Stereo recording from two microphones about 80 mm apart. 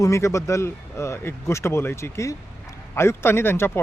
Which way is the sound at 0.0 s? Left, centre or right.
Left.